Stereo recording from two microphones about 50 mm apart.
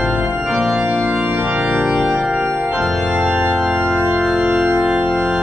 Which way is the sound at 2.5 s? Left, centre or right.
Right.